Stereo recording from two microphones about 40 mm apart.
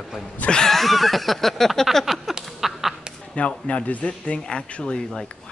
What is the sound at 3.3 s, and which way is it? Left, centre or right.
Speech, left.